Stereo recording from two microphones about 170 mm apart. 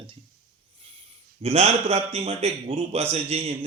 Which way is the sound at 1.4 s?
35° right (ahead or behind).